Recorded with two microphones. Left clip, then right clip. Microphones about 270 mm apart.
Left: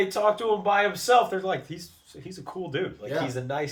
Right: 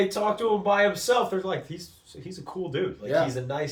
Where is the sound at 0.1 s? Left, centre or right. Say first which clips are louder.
Left 1 dB; centre.